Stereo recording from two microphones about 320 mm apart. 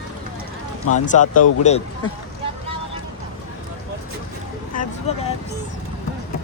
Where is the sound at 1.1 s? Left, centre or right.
Left.